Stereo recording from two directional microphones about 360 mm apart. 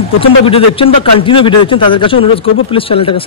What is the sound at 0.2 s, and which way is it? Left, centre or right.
Speech, centre.